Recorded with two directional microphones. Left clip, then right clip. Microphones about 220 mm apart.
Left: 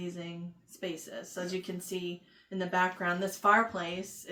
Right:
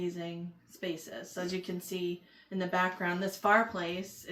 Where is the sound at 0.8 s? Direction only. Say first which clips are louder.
Even; 25° left (ahead or behind).